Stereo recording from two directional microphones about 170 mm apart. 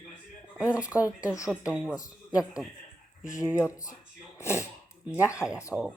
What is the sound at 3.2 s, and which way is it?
Speech, 20° left (ahead or behind).